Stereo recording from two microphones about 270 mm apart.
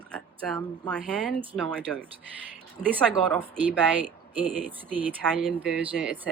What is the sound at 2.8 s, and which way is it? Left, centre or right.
Speech, left.